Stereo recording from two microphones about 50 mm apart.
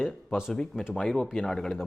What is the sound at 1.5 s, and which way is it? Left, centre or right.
Speech, centre.